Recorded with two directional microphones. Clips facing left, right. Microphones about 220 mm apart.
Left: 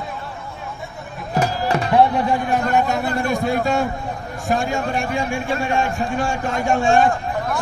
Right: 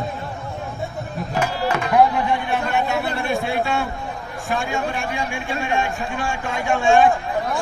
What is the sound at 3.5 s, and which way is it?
A man's voice, 40° left (ahead or behind).